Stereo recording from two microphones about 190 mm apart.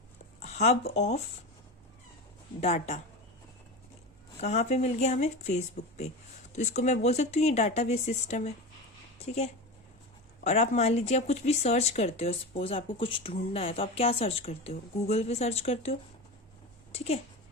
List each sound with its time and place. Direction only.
0.3 s speech: 35° left (ahead or behind)
2.6 s speech: 35° left (ahead or behind)
4.4 s speech: 35° left (ahead or behind)